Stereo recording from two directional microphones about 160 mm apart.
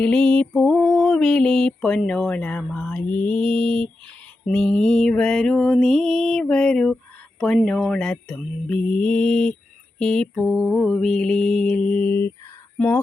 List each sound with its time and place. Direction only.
0.0 s a sound: 5° left (ahead or behind)
3.2 s mantra: 35° right (ahead or behind)
4.4 s mantra: 5° left (ahead or behind)